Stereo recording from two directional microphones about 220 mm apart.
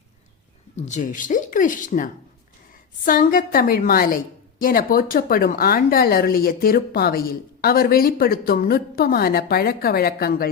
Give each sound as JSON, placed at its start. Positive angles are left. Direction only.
{"t": 0.8, "sound": "speech", "side_deg": 35}